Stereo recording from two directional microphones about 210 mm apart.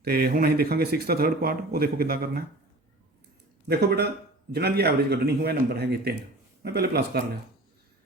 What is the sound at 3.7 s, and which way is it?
Speech, 50° right (ahead or behind).